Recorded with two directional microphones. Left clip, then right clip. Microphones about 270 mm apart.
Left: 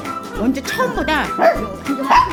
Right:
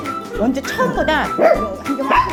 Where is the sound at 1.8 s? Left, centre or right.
Centre.